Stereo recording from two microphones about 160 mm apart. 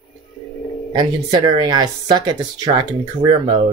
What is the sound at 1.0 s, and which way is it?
Speech, 25° right (ahead or behind).